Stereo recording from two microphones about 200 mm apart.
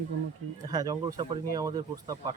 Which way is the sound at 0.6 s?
20° right (ahead or behind).